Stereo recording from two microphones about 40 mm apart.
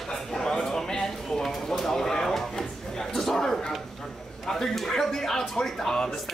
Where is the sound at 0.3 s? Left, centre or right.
Centre.